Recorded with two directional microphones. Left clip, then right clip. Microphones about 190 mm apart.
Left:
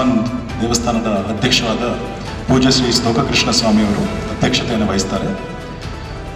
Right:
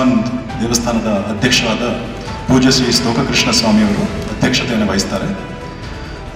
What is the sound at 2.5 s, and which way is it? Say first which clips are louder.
A man's voice: right 1 dB; 25° left (ahead or behind).